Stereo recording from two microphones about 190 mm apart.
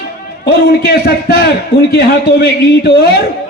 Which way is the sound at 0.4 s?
55° left (ahead or behind).